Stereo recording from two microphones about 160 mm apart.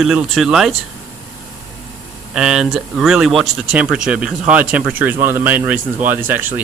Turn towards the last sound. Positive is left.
turn(degrees=-10)  # may be behind; listen again after turning